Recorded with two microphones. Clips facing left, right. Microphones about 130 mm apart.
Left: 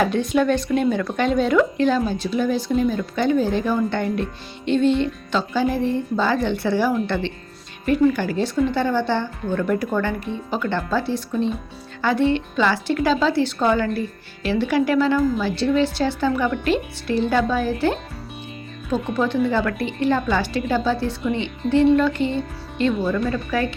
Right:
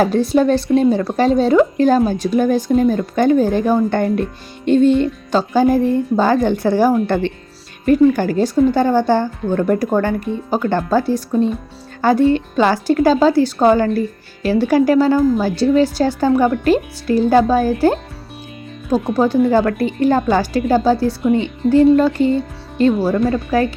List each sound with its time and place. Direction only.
0.0 s speech: 35° right (ahead or behind)
19.1 s speech: 40° right (ahead or behind)